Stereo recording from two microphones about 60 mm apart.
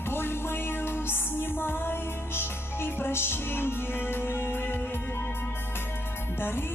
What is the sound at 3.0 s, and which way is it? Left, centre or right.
Music, left.